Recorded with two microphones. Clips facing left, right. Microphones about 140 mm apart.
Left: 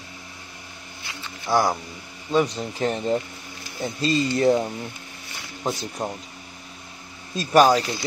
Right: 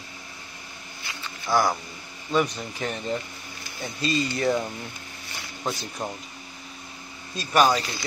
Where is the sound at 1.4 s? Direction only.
25° left (ahead or behind).